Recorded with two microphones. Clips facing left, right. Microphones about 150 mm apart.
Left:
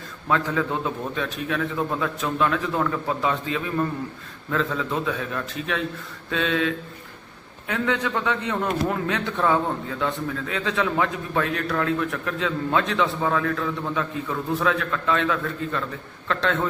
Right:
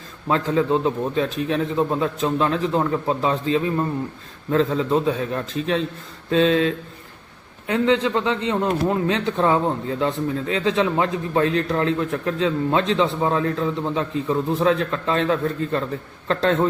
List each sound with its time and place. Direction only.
0.3 s a man's voice: 30° right (ahead or behind)